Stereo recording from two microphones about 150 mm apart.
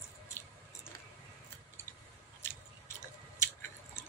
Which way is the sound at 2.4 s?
15° left (ahead or behind).